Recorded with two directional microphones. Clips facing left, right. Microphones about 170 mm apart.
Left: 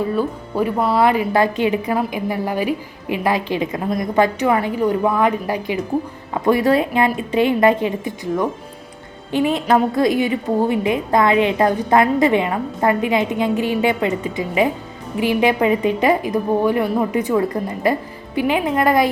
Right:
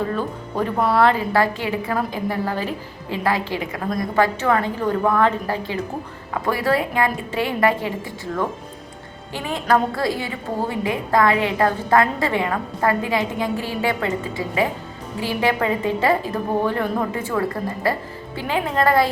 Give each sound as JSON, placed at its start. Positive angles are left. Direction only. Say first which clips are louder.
{"t": 0.1, "sound": "a woman's voice", "louder": "left 4 dB", "side_deg": 10}
{"t": 1.0, "sound": "a woman's voice", "louder": "left 2 dB", "side_deg": 15}